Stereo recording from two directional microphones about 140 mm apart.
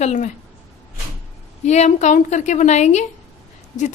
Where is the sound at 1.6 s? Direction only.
55° left (ahead or behind).